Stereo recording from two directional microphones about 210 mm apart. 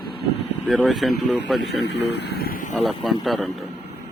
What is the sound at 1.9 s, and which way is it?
Speech, 55° left (ahead or behind).